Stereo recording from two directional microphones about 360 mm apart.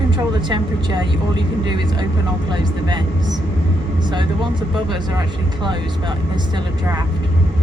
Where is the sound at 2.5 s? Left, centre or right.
Centre.